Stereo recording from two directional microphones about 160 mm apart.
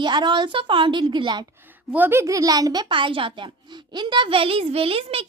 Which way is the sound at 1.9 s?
15° right (ahead or behind).